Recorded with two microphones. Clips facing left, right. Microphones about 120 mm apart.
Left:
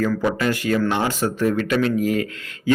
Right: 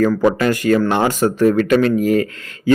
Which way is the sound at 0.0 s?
50° right (ahead or behind).